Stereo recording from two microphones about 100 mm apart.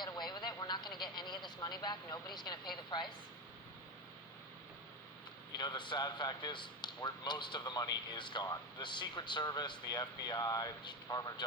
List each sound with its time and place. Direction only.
0.0 s vehicle: 45° left (ahead or behind)
5.5 s speech: 50° left (ahead or behind)